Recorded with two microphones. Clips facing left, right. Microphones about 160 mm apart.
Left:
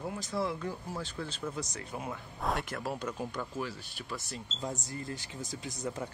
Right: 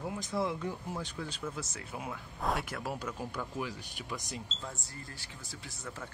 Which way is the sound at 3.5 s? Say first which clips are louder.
Left 1 dB; 15° right (ahead or behind).